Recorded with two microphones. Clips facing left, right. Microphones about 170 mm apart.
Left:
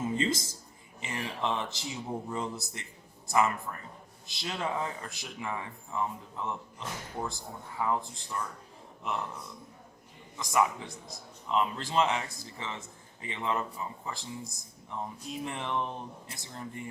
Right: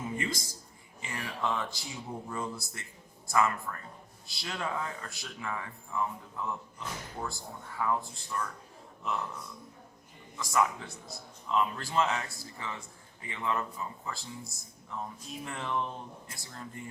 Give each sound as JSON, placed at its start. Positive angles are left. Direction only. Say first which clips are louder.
{"t": 1.0, "sound": "speech", "louder": "left 1 dB", "side_deg": 25}
{"t": 10.3, "sound": "speech", "louder": "left 1 dB", "side_deg": 20}